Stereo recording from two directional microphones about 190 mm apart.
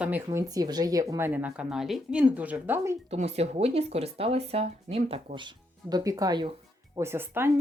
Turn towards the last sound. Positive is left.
turn(degrees=-10)  # may be behind; listen again after turning